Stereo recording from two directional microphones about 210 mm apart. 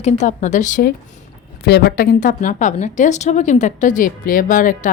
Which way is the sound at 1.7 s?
50° left (ahead or behind).